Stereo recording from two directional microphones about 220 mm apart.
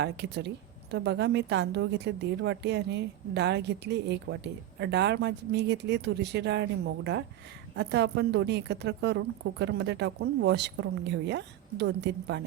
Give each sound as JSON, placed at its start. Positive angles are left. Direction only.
{"t": 0.0, "sound": "a woman's voice", "side_deg": -50}